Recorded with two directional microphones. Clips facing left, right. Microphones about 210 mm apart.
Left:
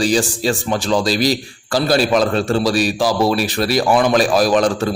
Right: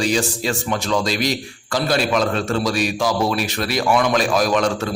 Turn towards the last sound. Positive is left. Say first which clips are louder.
# left 4 dB
turn(degrees=35)  # may be behind; listen again after turning